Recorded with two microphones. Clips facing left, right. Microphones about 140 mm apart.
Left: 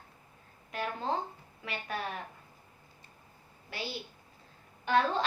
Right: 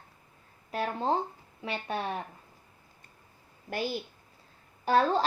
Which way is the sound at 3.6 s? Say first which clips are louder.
Right 7 dB; 50° right (ahead or behind).